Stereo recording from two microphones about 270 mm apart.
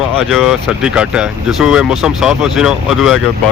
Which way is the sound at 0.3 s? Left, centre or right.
Centre.